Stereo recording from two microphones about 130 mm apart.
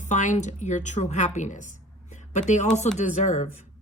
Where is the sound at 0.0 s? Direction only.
70° left (ahead or behind).